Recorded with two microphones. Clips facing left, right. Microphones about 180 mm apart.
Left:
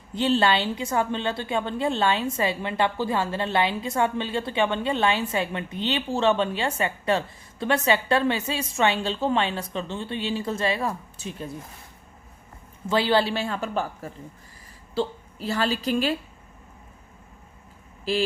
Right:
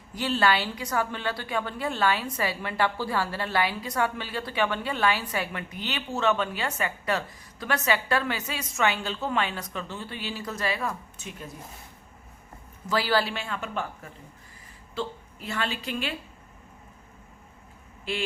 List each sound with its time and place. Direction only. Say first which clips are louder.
0.1 s a woman's voice: left 3 dB; 25° left (ahead or behind)
12.9 s a woman's voice: left 4 dB; 25° left (ahead or behind)
18.1 s speech: left 7 dB; 35° left (ahead or behind)